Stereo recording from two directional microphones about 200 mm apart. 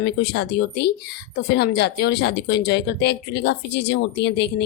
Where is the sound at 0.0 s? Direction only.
55° left (ahead or behind).